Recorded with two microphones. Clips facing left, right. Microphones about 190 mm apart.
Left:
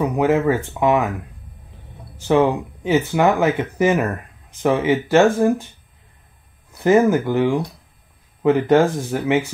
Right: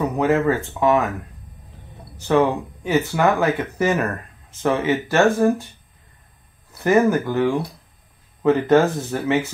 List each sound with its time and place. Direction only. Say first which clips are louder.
0.0 s speech: left 1 dB; 15° left (ahead or behind)
2.2 s speech: left 1 dB; 15° left (ahead or behind)
6.7 s speech: left 2 dB; 15° left (ahead or behind)